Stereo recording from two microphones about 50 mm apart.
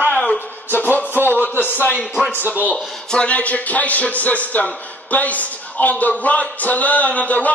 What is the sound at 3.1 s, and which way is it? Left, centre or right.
Speech, left.